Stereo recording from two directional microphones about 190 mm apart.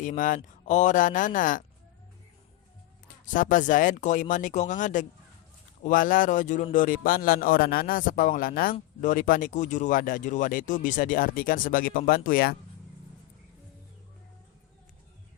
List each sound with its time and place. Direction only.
0.0 s speech: 45° left (ahead or behind)
3.2 s speech: 45° left (ahead or behind)